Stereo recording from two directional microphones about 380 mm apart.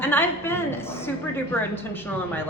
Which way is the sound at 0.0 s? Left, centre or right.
Centre.